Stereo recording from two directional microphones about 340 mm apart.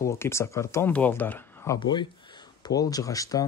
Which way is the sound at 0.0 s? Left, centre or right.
Centre.